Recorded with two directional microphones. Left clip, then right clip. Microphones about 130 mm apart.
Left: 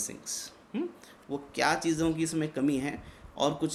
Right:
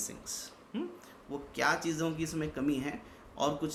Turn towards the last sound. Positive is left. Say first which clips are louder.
# left 3 dB
turn(degrees=55)  # may be behind; listen again after turning